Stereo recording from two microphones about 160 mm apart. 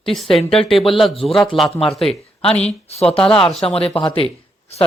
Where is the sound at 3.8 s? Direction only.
35° left (ahead or behind).